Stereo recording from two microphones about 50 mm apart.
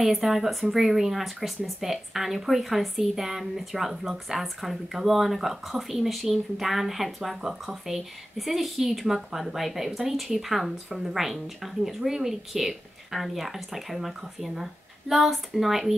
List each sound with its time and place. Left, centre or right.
0.0 s speech: centre